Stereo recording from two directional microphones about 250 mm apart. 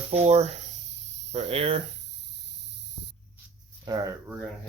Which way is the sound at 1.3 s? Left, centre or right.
Right.